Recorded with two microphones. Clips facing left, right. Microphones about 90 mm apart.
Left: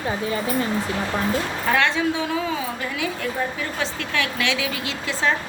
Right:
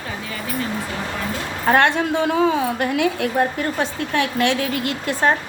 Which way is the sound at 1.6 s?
50° right (ahead or behind).